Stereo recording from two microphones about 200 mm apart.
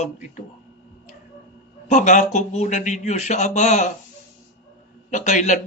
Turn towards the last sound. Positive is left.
turn(degrees=35)  # may be behind; listen again after turning